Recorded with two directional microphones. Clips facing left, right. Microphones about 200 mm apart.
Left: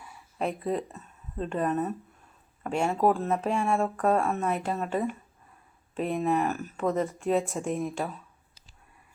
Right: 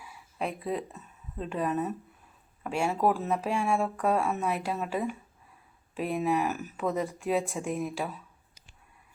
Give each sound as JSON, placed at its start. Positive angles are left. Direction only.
{"t": 0.0, "sound": "speech", "side_deg": 0}